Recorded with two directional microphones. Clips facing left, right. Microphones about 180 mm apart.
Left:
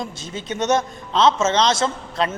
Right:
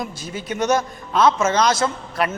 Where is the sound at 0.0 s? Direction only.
25° left (ahead or behind).